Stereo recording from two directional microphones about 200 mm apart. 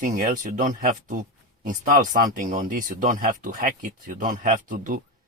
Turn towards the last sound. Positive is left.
turn(degrees=-40)  # may be behind; listen again after turning